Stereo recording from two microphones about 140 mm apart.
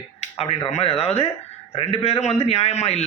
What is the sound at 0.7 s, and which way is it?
A man's voice, 45° left (ahead or behind).